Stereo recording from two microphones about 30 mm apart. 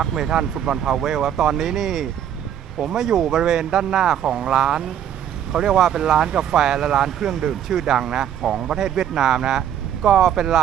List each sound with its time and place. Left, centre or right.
0.1 s speech: centre
0.8 s speech: centre
6.6 s speech: centre